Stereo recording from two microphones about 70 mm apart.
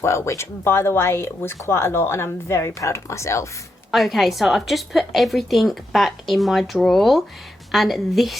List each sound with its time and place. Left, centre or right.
0.0 s speech: left
3.9 s a woman's voice: centre